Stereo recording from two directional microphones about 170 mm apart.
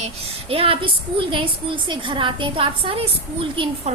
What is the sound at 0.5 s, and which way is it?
A woman's voice, 35° right (ahead or behind).